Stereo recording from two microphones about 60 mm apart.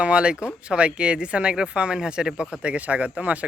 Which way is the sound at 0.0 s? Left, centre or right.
Centre.